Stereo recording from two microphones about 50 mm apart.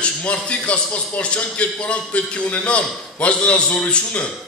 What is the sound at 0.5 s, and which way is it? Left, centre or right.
Speech, left.